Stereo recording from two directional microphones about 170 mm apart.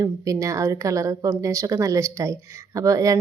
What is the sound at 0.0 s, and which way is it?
Speech, 20° right (ahead or behind).